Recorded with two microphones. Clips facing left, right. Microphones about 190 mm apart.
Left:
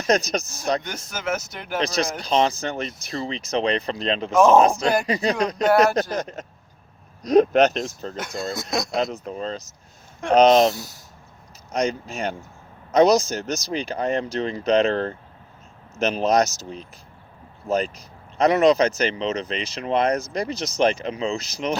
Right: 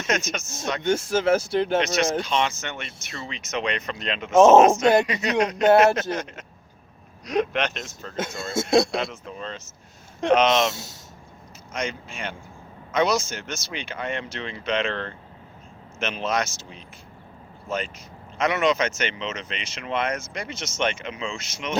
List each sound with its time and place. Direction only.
0.1 s speech: 35° left (ahead or behind)
0.8 s speech: 25° right (ahead or behind)
1.8 s speech: 35° left (ahead or behind)
4.4 s speech: 25° right (ahead or behind)
5.0 s speech: 35° left (ahead or behind)
8.5 s speech: 30° right (ahead or behind)
9.0 s speech: 40° left (ahead or behind)
10.8 s speech: 25° right (ahead or behind)
11.7 s speech: 40° left (ahead or behind)